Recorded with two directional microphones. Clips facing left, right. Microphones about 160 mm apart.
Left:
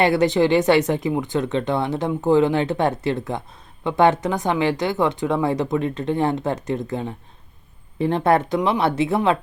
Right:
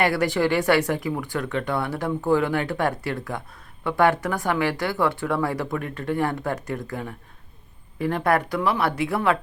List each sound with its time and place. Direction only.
0.0 s speech: 20° left (ahead or behind)